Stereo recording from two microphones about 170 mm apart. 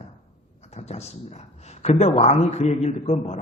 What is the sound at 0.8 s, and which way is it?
A man's voice, 40° left (ahead or behind).